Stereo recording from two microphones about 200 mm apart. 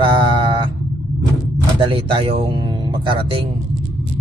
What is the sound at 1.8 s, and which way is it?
A man's voice, 25° right (ahead or behind).